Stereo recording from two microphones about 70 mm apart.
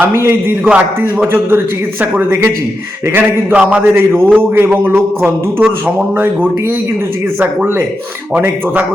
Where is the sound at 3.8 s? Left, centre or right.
Right.